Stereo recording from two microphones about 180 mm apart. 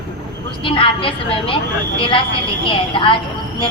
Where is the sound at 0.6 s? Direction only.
30° left (ahead or behind).